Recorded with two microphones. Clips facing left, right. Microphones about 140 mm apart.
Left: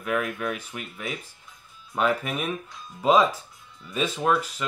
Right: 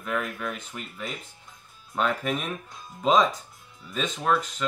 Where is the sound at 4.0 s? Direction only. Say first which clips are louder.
Left 2 dB; 5° left (ahead or behind).